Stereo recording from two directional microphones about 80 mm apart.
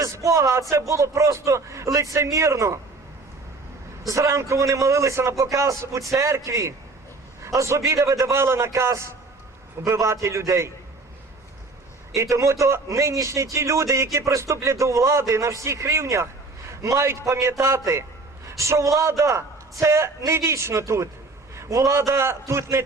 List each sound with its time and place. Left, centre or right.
0.0 s a man's voice: right
4.0 s a man's voice: right
12.1 s a man's voice: right